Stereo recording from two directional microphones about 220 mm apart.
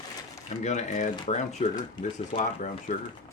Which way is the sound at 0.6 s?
35° left (ahead or behind).